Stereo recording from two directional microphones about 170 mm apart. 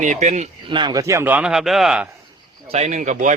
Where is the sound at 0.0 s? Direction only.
45° right (ahead or behind).